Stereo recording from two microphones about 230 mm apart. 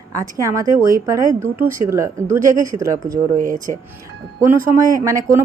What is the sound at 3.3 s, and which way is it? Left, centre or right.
Speech, right.